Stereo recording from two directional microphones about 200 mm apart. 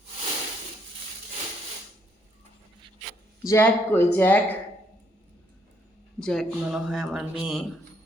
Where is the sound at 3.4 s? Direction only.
10° left (ahead or behind).